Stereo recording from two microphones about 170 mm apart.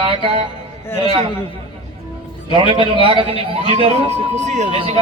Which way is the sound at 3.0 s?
30° right (ahead or behind).